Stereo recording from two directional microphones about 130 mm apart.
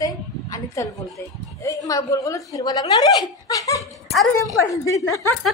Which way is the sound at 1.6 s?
25° left (ahead or behind).